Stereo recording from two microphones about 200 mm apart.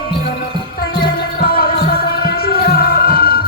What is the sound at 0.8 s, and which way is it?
Music, 50° left (ahead or behind).